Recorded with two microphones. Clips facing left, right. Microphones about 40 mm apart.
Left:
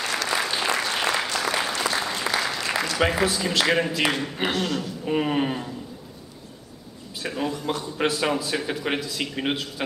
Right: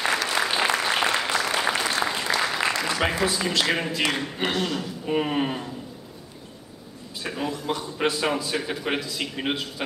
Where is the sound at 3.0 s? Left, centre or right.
Centre.